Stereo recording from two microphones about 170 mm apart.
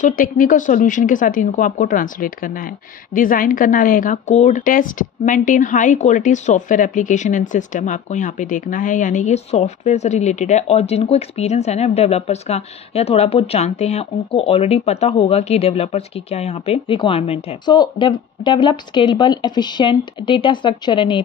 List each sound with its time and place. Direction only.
0.0 s speech: 55° left (ahead or behind); by 21.2 s 30° left (ahead or behind)